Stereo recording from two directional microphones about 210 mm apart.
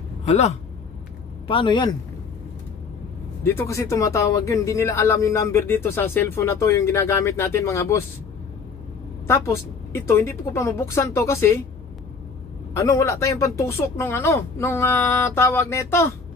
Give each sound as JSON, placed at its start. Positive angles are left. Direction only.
{"t": 0.3, "sound": "a man's voice", "side_deg": 30}
{"t": 3.4, "sound": "speech", "side_deg": 15}
{"t": 9.3, "sound": "speech", "side_deg": 10}
{"t": 12.7, "sound": "speech", "side_deg": 15}